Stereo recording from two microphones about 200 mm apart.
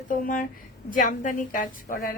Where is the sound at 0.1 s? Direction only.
45° left (ahead or behind).